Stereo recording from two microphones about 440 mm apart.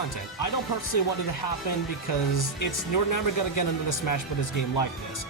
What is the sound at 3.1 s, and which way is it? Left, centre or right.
Speech, left.